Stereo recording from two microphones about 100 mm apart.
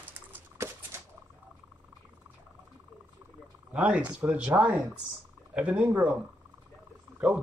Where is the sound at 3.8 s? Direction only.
10° right (ahead or behind).